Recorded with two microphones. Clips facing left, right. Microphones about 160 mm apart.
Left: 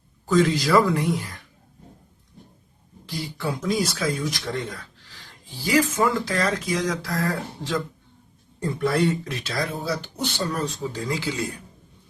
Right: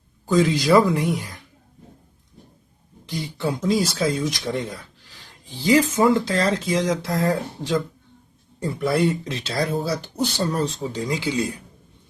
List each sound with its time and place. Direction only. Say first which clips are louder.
0.3 s speech: right 2 dB; 15° right (ahead or behind)
3.1 s speech: right 3 dB; 20° right (ahead or behind)
8.8 s speech: right 1 dB; 15° right (ahead or behind)